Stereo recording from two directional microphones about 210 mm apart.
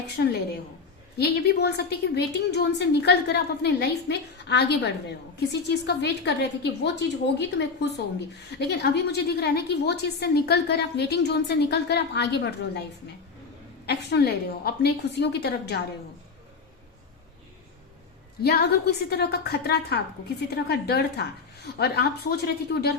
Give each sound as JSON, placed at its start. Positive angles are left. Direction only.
{"t": 0.2, "sound": "a woman's voice", "side_deg": 50}
{"t": 13.8, "sound": "a woman's voice", "side_deg": 50}
{"t": 18.4, "sound": "a woman's voice", "side_deg": 50}